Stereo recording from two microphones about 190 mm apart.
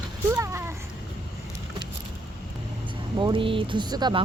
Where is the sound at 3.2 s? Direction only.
25° right (ahead or behind).